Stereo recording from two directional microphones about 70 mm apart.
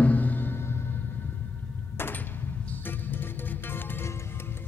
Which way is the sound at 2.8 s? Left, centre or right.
Left.